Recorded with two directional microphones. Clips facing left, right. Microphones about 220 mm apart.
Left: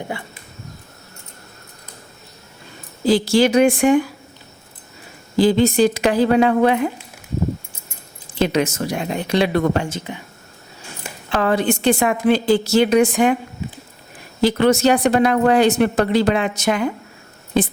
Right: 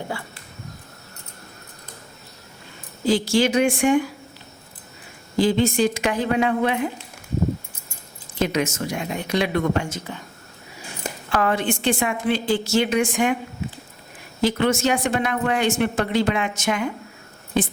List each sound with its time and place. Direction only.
3.1 s speech: 35° left (ahead or behind)
5.4 s speech: 35° left (ahead or behind)
8.4 s speech: 35° left (ahead or behind)
10.0 s speech: 15° left (ahead or behind)
11.3 s speech: 30° left (ahead or behind)
14.4 s speech: 35° left (ahead or behind)